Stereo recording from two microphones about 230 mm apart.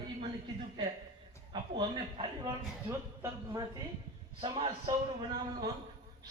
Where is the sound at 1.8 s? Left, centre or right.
Right.